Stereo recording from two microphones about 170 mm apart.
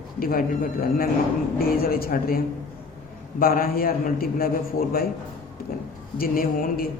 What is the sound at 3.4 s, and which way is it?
Speech, 60° left (ahead or behind).